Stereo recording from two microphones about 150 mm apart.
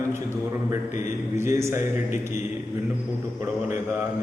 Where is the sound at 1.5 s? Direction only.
20° right (ahead or behind).